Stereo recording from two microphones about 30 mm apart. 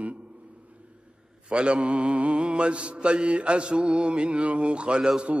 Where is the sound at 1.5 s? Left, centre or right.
Right.